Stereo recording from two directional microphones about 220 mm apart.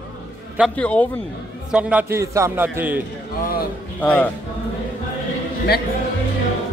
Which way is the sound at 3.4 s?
40° left (ahead or behind).